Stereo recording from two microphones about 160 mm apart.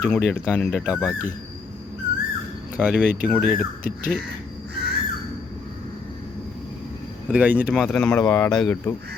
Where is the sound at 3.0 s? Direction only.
55° right (ahead or behind).